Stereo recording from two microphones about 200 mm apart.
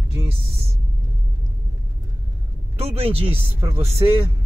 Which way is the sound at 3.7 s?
10° right (ahead or behind).